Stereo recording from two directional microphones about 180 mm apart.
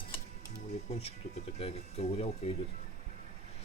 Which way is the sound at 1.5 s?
35° left (ahead or behind).